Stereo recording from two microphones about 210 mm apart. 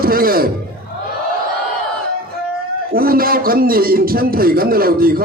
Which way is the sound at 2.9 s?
45° right (ahead or behind).